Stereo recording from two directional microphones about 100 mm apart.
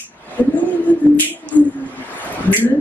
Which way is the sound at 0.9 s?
15° left (ahead or behind).